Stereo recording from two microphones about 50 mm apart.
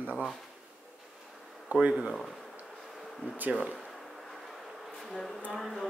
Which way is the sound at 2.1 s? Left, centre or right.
Centre.